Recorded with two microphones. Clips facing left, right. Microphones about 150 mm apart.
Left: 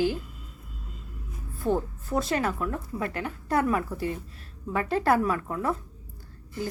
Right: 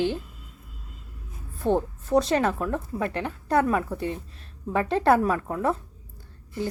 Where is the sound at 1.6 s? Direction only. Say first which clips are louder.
Right 3 dB; 25° right (ahead or behind).